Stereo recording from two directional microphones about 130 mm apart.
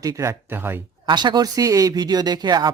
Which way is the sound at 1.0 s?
35° right (ahead or behind).